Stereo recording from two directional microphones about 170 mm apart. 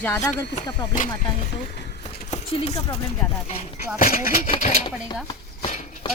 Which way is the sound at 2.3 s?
40° left (ahead or behind).